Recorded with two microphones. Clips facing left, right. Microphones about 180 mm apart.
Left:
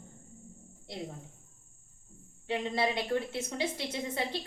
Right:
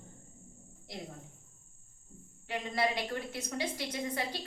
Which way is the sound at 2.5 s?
25° left (ahead or behind).